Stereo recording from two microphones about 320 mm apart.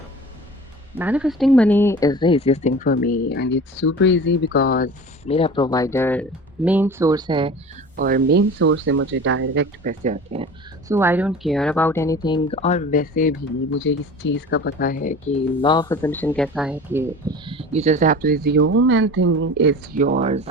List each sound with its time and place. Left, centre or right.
0.9 s speech: centre
6.7 s speech: centre
7.9 s speech: right
9.8 s speech: right; by 13.3 s left
13.7 s speech: left; by 20.0 s right
20.0 s speech: right